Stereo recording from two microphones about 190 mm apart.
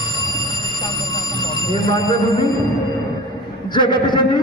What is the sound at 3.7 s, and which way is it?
Speech, 25° left (ahead or behind).